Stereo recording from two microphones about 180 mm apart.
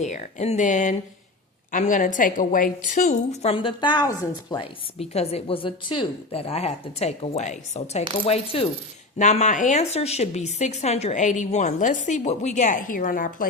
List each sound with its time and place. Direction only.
0.0 s a woman's voice: 40° left (ahead or behind)
3.5 s a woman's voice: 30° left (ahead or behind); by 13.5 s 50° left (ahead or behind)